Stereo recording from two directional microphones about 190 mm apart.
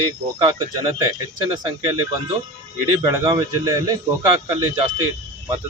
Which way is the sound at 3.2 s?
15° right (ahead or behind).